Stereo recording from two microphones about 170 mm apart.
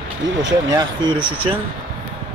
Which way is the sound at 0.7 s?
25° right (ahead or behind).